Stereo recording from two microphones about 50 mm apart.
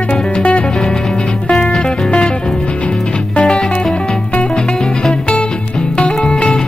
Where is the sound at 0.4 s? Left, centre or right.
Left.